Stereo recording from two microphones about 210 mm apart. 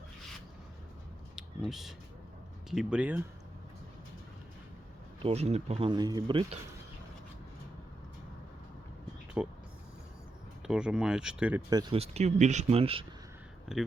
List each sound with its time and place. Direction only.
1.4 s a sound: centre (ahead or behind)
2.6 s speech: 5° right (ahead or behind)
5.2 s speech: 30° right (ahead or behind)
9.4 s speech: 5° right (ahead or behind)
10.7 s speech: 5° right (ahead or behind)
11.7 s speech: 20° right (ahead or behind)
13.7 s speech: centre (ahead or behind)